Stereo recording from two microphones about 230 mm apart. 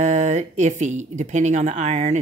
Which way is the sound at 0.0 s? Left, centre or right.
Right.